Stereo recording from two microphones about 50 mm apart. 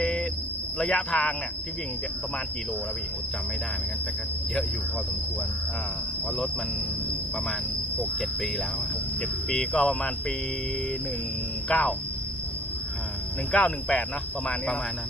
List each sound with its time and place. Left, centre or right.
0.0 s cricket: left
9.5 s cricket: left
11.7 s cricket: left
13.5 s cricket: left